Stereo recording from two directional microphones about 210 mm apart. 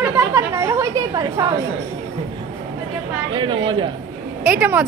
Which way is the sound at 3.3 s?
25° right (ahead or behind).